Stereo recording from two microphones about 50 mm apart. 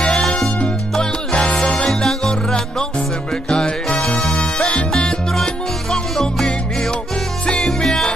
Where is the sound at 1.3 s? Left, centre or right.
Centre.